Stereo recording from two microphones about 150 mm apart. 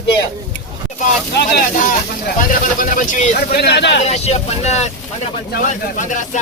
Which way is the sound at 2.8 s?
60° left (ahead or behind).